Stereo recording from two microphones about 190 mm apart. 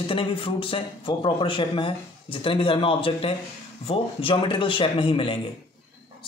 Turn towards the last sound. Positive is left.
turn(degrees=30)  # may be behind; listen again after turning